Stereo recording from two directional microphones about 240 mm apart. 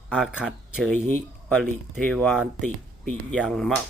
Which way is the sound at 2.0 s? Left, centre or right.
Centre.